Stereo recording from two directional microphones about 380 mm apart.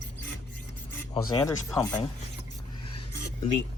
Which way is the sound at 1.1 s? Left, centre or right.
Centre.